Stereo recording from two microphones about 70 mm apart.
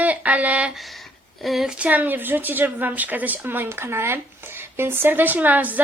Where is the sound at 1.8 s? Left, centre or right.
Right.